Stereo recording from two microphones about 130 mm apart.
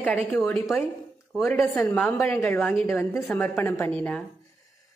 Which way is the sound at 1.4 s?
15° left (ahead or behind).